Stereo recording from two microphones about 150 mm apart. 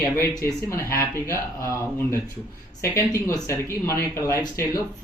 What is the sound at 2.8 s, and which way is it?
Speech, 20° left (ahead or behind).